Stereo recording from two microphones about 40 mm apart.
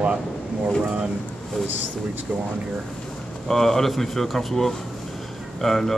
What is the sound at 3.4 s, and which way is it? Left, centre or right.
Speech, centre.